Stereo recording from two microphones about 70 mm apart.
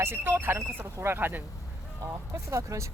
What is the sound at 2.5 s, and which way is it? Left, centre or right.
Speech, right.